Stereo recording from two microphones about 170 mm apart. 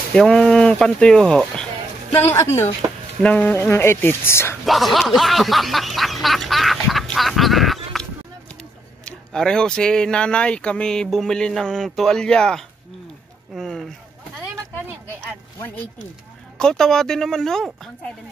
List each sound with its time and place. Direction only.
0.1 s speech: 5° left (ahead or behind)
2.3 s speech: 15° left (ahead or behind)
4.6 s snicker: centre (ahead or behind)
9.0 s speech: 5° left (ahead or behind)
13.6 s a sound: centre (ahead or behind)
16.5 s speech: 5° left (ahead or behind)